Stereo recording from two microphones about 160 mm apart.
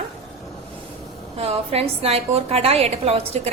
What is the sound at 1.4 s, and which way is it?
A woman's voice, 40° right (ahead or behind).